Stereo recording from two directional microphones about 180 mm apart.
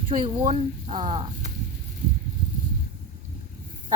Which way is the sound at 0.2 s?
30° right (ahead or behind).